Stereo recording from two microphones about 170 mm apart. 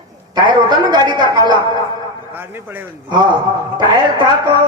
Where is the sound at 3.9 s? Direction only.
25° right (ahead or behind).